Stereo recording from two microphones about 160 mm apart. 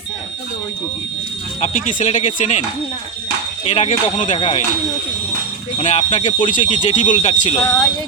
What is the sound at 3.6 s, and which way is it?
Speech, 40° left (ahead or behind).